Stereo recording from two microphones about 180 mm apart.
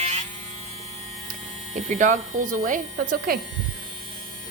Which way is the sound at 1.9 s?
45° right (ahead or behind).